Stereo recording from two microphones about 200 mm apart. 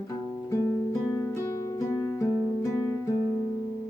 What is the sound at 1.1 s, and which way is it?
Music, 15° left (ahead or behind).